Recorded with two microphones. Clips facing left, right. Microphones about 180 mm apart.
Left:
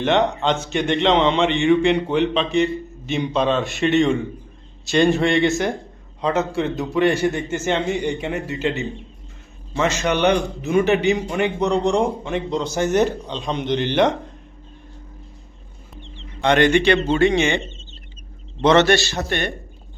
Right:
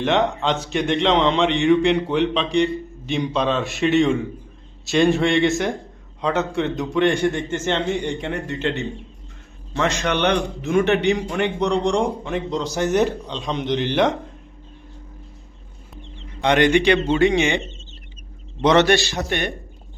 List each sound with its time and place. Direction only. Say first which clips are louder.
0.0 s a man's voice: left 1 dB; centre (ahead or behind)
16.4 s a man's voice: left 1 dB; 15° right (ahead or behind)
18.6 s a man's voice: left 1 dB; 15° right (ahead or behind)